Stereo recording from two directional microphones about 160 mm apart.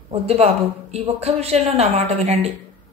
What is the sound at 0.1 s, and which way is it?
A woman's voice, 40° right (ahead or behind).